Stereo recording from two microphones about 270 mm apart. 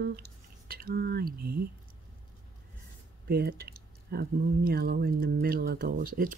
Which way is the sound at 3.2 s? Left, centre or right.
Right.